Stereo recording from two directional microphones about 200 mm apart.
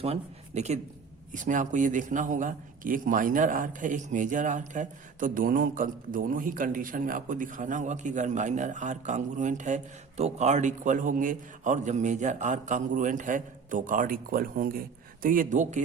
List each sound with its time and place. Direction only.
0.0 s a man's voice: 30° right (ahead or behind)